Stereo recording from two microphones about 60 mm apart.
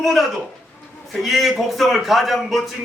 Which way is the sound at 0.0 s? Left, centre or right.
Centre.